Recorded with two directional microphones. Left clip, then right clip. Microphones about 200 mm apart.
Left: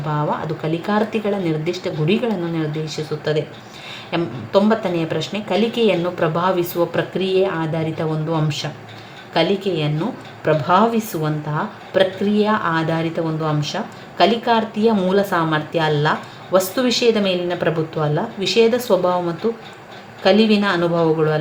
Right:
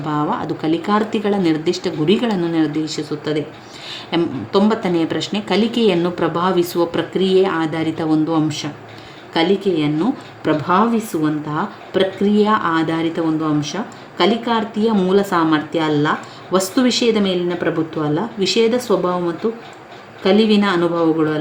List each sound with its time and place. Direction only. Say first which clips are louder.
0.1 s a woman's voice: right 2 dB; 35° right (ahead or behind)
10.4 s a woman's voice: left 1 dB; 35° right (ahead or behind)
20.3 s a woman's voice: right 3 dB; 35° right (ahead or behind)